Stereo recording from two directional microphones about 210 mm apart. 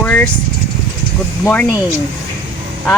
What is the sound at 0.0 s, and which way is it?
Vehicle, 10° left (ahead or behind).